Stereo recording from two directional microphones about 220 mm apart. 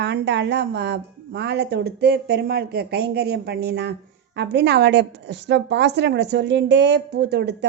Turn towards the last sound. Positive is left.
turn(degrees=-50)  # may be behind; listen again after turning